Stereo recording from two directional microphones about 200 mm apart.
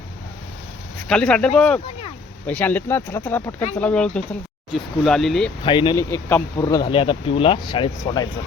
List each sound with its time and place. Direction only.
1.0 s speech: 5° left (ahead or behind)
5.6 s speech: 25° left (ahead or behind)